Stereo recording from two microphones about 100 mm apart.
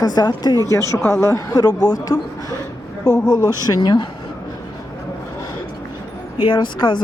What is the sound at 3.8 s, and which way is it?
Speech, 50° left (ahead or behind).